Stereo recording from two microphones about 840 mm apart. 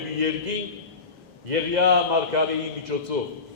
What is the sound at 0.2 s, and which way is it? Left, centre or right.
A man's voice, right.